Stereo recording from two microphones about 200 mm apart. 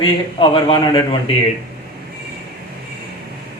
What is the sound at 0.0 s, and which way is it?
A man's voice, 25° left (ahead or behind).